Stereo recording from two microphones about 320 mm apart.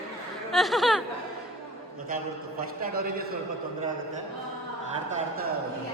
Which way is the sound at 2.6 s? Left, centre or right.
Right.